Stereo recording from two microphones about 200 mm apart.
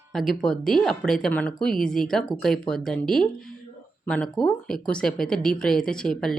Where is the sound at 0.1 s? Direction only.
Centre (ahead or behind).